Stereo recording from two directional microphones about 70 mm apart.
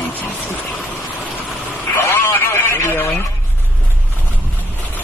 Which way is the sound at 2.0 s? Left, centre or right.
Left.